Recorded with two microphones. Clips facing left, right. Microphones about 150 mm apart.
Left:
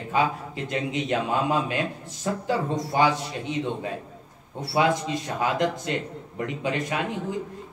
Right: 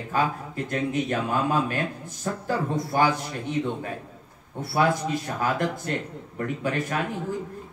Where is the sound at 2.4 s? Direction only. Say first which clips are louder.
Even; 15° left (ahead or behind).